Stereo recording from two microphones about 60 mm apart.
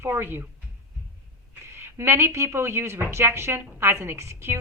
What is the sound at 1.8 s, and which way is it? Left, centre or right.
A woman's voice, right.